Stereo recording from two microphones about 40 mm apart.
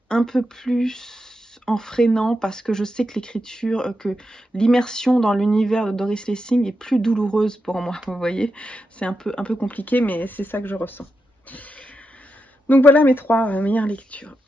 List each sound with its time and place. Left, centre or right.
0.1 s speech: centre
9.7 s speech: left
12.8 s speech: left
13.4 s speech: left